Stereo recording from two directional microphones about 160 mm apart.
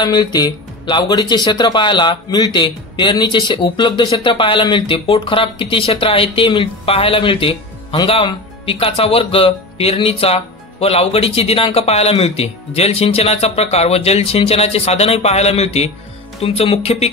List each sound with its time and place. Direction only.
0.0 s speech: 25° left (ahead or behind)